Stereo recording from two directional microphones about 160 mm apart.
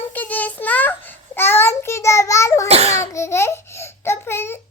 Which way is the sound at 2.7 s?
40° right (ahead or behind).